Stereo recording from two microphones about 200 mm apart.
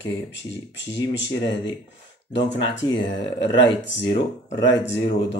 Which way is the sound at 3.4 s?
60° left (ahead or behind).